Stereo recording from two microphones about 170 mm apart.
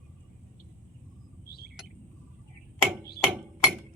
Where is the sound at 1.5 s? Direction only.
65° left (ahead or behind).